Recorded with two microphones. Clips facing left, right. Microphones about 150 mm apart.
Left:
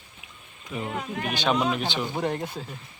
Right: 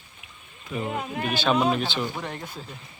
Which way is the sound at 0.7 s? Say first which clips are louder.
Right 2 dB; 10° left (ahead or behind).